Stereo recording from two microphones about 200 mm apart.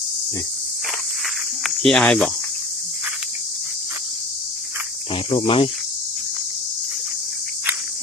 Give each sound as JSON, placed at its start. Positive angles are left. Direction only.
{"t": 1.6, "sound": "speech", "side_deg": 5}
{"t": 5.3, "sound": "cricket", "side_deg": 25}